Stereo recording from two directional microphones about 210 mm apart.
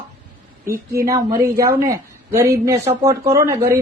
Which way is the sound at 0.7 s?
45° right (ahead or behind).